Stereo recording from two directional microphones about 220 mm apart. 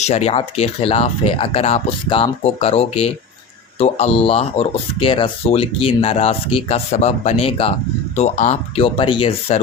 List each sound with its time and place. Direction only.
0.0 s speech: 30° left (ahead or behind)